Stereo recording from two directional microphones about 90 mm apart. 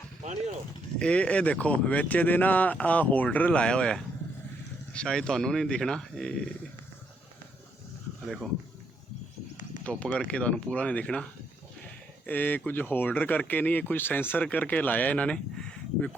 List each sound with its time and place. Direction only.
0.9 s speech: 10° left (ahead or behind)
9.8 s speech: 15° left (ahead or behind)